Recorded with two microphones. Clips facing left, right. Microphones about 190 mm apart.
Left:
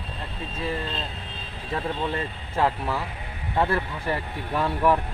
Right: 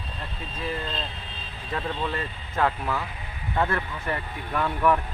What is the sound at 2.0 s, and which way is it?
Speech, 25° left (ahead or behind).